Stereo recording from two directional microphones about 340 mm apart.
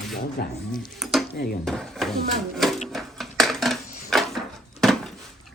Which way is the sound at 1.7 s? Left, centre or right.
Centre.